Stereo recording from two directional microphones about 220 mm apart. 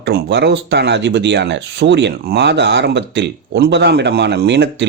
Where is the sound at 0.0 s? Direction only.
50° right (ahead or behind).